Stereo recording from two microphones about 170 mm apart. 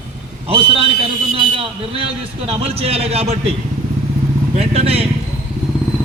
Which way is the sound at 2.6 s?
35° right (ahead or behind).